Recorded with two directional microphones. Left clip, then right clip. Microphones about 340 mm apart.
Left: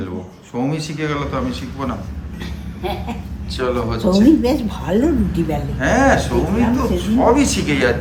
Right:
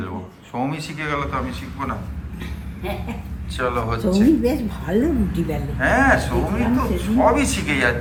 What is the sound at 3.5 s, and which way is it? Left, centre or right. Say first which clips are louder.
Speech: left 2 dB; centre.